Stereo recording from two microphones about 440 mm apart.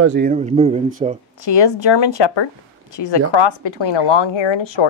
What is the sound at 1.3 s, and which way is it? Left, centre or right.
Speech, left.